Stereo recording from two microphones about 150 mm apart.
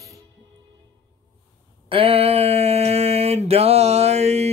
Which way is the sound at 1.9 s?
40° right (ahead or behind).